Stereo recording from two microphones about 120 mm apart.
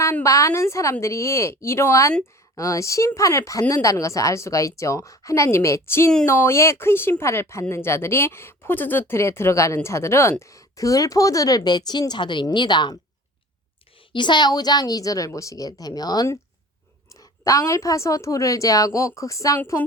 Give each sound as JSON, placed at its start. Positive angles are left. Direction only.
{"t": 0.0, "sound": "a woman's voice", "side_deg": 25}
{"t": 14.1, "sound": "a woman's voice", "side_deg": 40}